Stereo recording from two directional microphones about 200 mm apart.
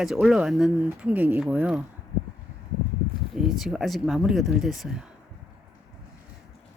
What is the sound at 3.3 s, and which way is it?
Speech, centre (ahead or behind).